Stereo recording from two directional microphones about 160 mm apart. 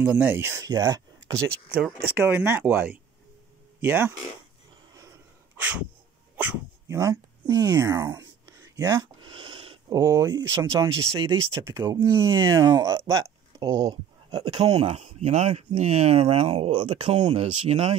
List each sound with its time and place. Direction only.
0.0 s speech: 10° right (ahead or behind)
1.8 s speech: 10° right (ahead or behind)
3.8 s speech: 10° right (ahead or behind)
6.3 s dog: 10° right (ahead or behind); by 9.9 s 35° right (ahead or behind)
9.9 s speech: 20° right (ahead or behind)
14.3 s speech: 35° right (ahead or behind)